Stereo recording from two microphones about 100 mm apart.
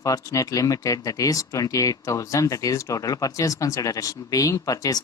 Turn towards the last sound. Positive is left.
turn(degrees=35)  # may be behind; listen again after turning